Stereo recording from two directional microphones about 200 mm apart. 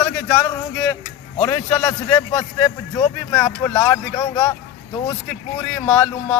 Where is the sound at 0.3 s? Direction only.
15° left (ahead or behind).